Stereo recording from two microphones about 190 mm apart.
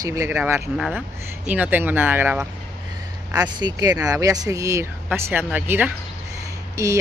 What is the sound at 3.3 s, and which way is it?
Speech, 20° right (ahead or behind).